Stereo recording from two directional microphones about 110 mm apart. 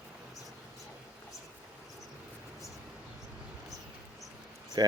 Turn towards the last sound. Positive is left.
turn(degrees=-40)  # may be behind; listen again after turning